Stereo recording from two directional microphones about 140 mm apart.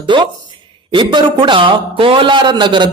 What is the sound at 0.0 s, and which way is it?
A man's voice, 35° right (ahead or behind).